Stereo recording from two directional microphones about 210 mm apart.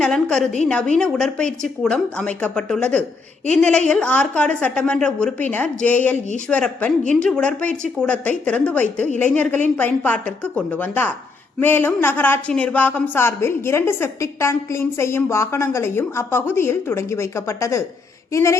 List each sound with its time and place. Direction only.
0.0 s a woman's voice: 5° left (ahead or behind)